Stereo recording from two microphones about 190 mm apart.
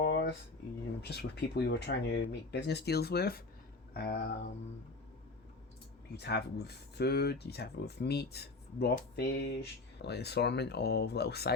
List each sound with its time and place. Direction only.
0.0 s a sound: 60° left (ahead or behind)
1.0 s speech: 60° left (ahead or behind)
6.1 s speech: 60° left (ahead or behind)